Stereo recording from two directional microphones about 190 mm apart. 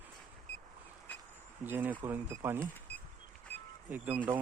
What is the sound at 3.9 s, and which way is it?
Speech, 10° right (ahead or behind).